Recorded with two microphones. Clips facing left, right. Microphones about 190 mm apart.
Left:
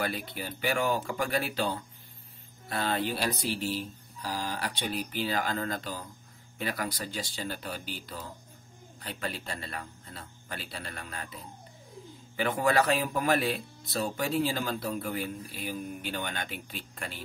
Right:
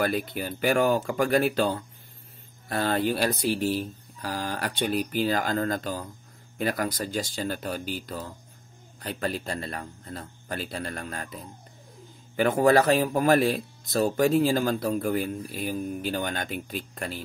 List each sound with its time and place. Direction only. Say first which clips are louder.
0.0 s speech: right 7 dB; 50° right (ahead or behind)
2.7 s speech: right 5 dB; 45° right (ahead or behind)
12.4 s speech: right 6 dB; 45° right (ahead or behind)